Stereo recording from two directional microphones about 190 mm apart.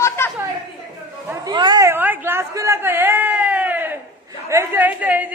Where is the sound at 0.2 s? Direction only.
15° left (ahead or behind).